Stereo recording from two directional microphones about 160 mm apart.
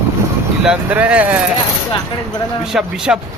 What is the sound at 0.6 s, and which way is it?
Speech, 5° right (ahead or behind).